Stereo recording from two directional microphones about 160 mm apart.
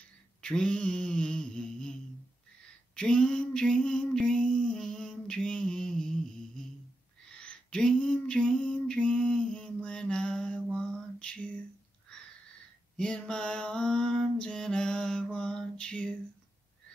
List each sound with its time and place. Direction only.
0.4 s mantra: 5° left (ahead or behind)
3.0 s a sound: 5° left (ahead or behind)
12.9 s mantra: 5° left (ahead or behind)